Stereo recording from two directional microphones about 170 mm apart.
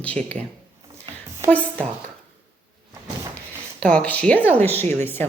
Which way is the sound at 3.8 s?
5° left (ahead or behind).